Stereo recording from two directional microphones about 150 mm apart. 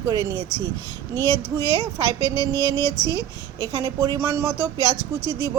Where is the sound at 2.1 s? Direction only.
25° right (ahead or behind).